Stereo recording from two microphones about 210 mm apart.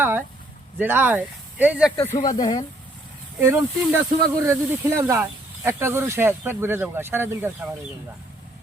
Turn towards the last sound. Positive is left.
turn(degrees=-10)  # may be behind; listen again after turning